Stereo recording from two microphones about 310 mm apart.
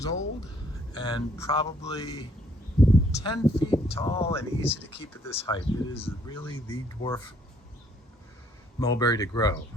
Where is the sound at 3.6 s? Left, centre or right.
Centre.